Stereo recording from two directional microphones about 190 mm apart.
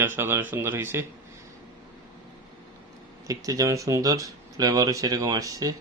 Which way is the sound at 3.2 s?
20° right (ahead or behind).